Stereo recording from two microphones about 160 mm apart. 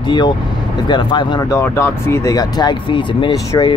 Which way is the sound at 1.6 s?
15° left (ahead or behind).